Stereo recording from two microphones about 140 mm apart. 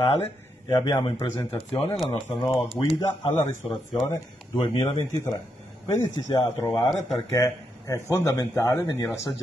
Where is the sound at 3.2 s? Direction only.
35° left (ahead or behind); by 9.0 s 20° left (ahead or behind).